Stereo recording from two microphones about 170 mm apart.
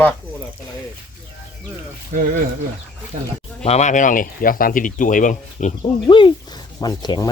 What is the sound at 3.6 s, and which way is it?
Speech, 40° left (ahead or behind).